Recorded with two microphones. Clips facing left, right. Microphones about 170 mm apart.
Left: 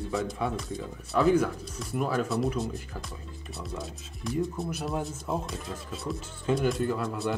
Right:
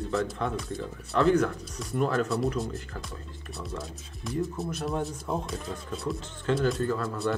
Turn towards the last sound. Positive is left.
turn(degrees=15)  # may be behind; listen again after turning